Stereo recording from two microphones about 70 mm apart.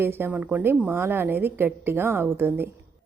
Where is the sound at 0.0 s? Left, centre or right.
Right.